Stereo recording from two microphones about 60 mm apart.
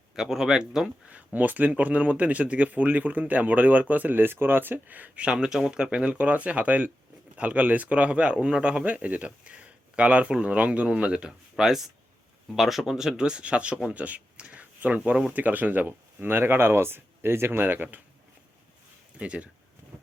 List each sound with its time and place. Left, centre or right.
0.2 s speech: centre
1.1 s speech: right
19.2 s speech: right